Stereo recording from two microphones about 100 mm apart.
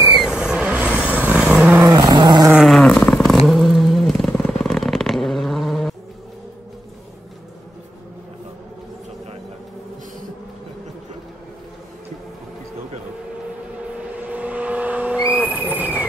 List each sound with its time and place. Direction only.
0.2 s vehicle: 5° right (ahead or behind)
2.0 s a sound: 45° right (ahead or behind)
2.8 s vehicle: 10° left (ahead or behind)
14.1 s vehicle: 15° right (ahead or behind)
15.7 s train: 15° right (ahead or behind)